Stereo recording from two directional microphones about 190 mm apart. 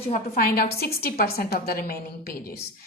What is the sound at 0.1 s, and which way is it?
A woman's voice, 50° left (ahead or behind).